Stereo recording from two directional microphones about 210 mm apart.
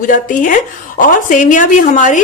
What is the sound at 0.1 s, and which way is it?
A woman's voice, 40° left (ahead or behind).